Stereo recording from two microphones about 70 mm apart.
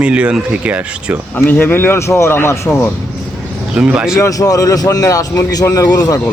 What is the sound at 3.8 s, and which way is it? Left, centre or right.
Speech, right.